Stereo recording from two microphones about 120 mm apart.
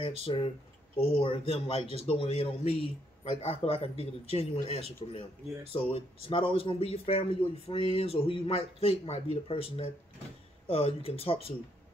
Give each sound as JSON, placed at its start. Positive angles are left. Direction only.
{"t": 0.2, "sound": "speech", "side_deg": 50}